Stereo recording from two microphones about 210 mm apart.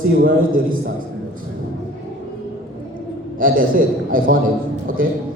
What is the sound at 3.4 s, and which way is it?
A man's voice, 40° right (ahead or behind).